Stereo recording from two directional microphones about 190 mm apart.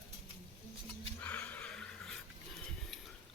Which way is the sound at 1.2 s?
5° left (ahead or behind).